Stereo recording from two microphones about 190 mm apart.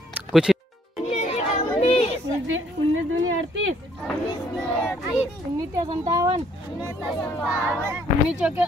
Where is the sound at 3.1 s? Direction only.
90° right.